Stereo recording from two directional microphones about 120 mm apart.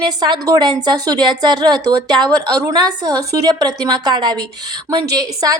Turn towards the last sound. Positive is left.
turn(degrees=-35)  # may be behind; listen again after turning